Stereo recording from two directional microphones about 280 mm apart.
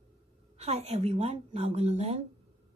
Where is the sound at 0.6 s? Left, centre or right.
Right.